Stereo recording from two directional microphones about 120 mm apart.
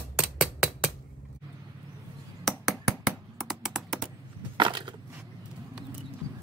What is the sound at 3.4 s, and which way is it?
Computer keyboard, 5° right (ahead or behind).